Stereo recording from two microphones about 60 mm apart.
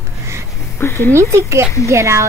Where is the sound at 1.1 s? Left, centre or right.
Right.